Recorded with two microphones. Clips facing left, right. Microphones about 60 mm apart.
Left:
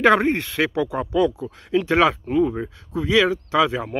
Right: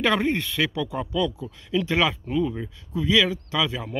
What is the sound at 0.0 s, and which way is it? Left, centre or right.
Speech, left.